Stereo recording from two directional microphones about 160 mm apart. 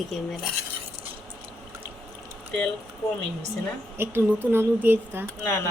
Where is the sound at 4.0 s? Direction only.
15° right (ahead or behind).